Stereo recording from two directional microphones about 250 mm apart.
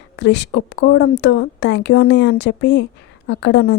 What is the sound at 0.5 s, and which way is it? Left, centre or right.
A woman's voice, left.